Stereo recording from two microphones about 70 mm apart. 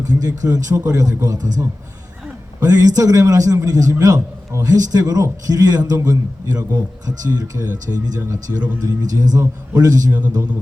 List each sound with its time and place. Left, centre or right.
0.0 s a man's voice: right
10.1 s speech: right